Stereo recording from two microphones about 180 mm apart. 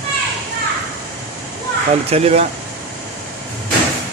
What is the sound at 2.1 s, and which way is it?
Speech, 35° right (ahead or behind).